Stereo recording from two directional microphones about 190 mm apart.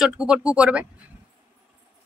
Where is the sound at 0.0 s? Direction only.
5° right (ahead or behind).